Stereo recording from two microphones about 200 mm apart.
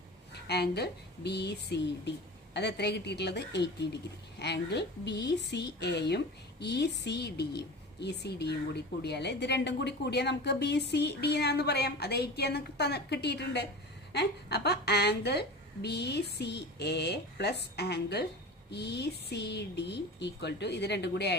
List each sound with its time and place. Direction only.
0.4 s a woman's voice: 55° left (ahead or behind)